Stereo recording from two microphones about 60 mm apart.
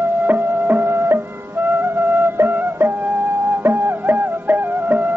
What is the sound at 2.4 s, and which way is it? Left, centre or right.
Music, right.